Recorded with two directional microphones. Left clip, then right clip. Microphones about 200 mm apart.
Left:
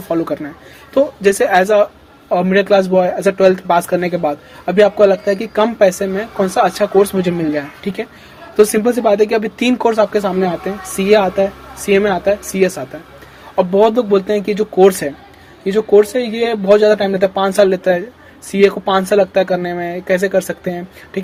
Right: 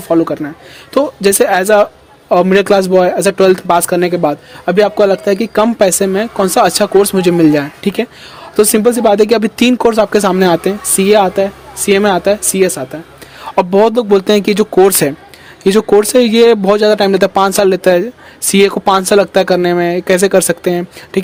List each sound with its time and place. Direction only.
0.1 s speech: 30° right (ahead or behind)
0.9 s speech: 40° right (ahead or behind)
13.6 s speech: 45° right (ahead or behind)